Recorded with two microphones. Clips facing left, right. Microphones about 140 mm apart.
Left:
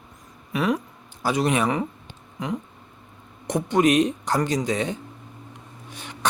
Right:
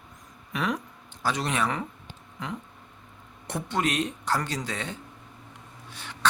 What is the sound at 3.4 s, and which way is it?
Speech, 15° left (ahead or behind).